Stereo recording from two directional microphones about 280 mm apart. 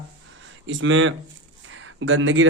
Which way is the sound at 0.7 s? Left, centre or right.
Right.